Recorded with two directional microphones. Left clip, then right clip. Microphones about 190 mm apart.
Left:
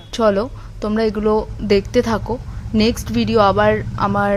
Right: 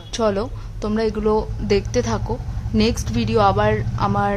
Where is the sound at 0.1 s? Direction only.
20° left (ahead or behind).